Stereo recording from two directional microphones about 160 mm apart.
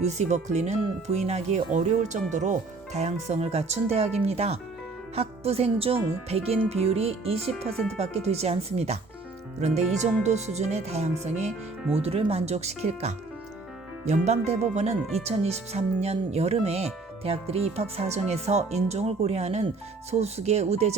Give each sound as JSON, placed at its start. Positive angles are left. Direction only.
{"t": 0.0, "sound": "speech", "side_deg": -45}